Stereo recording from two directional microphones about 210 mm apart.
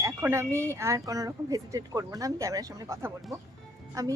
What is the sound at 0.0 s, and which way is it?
A woman's voice, 10° right (ahead or behind).